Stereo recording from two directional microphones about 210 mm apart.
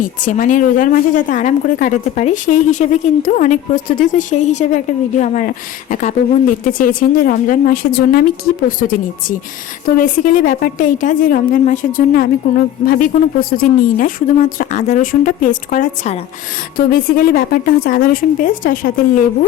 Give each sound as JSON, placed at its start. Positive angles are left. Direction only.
{"t": 0.0, "sound": "a woman's voice", "side_deg": 40}